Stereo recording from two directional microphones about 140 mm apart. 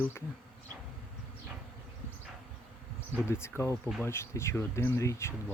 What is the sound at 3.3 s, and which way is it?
Speech, 20° left (ahead or behind).